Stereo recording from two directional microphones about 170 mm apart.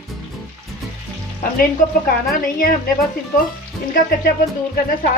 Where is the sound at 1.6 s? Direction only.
55° left (ahead or behind).